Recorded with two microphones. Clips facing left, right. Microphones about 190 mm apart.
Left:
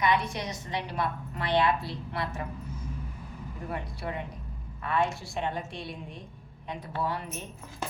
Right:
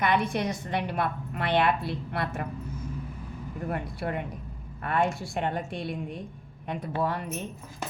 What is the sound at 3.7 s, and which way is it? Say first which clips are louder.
A woman's voice: right 4 dB; 55° right (ahead or behind).